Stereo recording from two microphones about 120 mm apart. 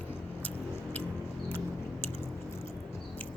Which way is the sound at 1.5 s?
15° left (ahead or behind).